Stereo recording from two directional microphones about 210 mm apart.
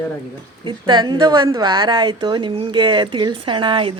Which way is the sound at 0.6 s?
20° right (ahead or behind).